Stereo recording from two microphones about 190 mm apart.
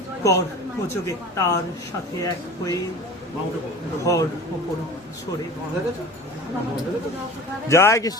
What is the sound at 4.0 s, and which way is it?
Speech, 15° left (ahead or behind).